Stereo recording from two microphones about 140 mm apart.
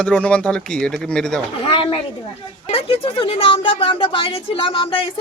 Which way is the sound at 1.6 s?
40° left (ahead or behind).